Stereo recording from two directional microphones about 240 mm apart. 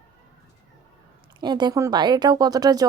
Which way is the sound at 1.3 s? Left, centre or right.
Centre.